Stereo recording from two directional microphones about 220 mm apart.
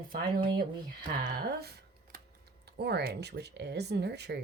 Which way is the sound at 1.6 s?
45° right (ahead or behind).